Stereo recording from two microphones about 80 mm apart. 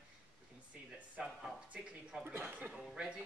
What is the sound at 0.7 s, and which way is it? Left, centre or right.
Speech, centre.